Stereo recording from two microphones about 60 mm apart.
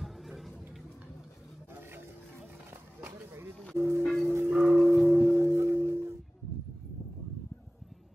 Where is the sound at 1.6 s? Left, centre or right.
Right.